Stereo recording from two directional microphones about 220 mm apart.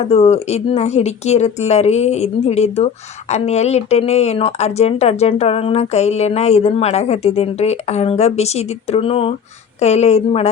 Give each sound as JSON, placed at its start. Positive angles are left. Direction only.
{"t": 0.0, "sound": "speech", "side_deg": 25}